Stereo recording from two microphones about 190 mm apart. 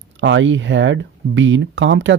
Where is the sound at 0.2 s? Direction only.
80° right.